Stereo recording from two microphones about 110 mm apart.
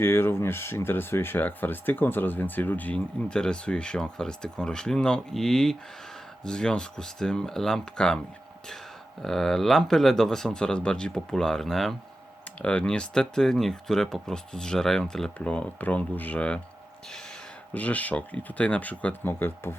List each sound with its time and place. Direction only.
0.0 s speech: 20° left (ahead or behind)
9.2 s speech: 5° left (ahead or behind)
17.7 s speech: 15° left (ahead or behind)